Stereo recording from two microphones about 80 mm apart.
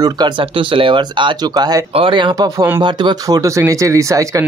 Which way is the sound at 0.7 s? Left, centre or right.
Right.